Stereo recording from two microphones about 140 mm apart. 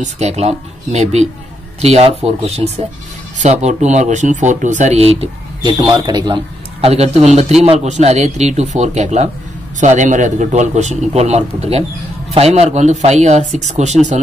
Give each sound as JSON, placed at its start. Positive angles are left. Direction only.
{"t": 0.0, "sound": "speech", "side_deg": -50}
{"t": 5.7, "sound": "a man's voice", "side_deg": -30}